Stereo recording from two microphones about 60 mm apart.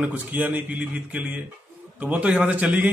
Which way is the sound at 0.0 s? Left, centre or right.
Right.